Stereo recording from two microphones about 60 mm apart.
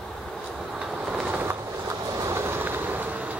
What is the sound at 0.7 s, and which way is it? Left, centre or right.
Train, centre.